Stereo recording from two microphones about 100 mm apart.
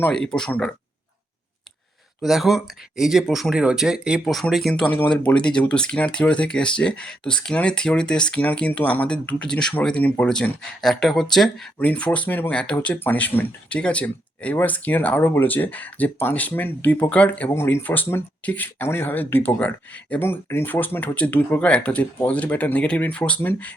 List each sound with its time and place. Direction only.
0.1 s speech: 5° left (ahead or behind)
2.2 s speech: centre (ahead or behind)
5.0 s speech: 10° left (ahead or behind)
11.8 s speech: 15° left (ahead or behind)
17.5 s speech: 25° left (ahead or behind)